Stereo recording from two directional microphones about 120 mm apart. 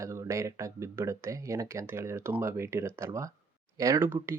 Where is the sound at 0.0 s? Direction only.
25° right (ahead or behind).